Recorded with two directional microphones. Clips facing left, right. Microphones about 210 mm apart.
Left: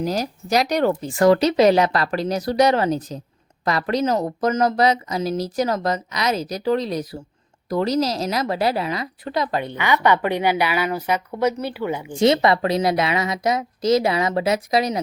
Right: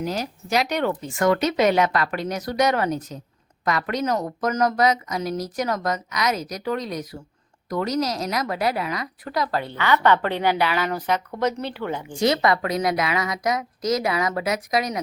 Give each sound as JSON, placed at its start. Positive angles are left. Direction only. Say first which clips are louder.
{"t": 0.0, "sound": "a woman's voice", "louder": "left 4 dB", "side_deg": 40}
{"t": 12.1, "sound": "speech", "louder": "left 4 dB", "side_deg": 25}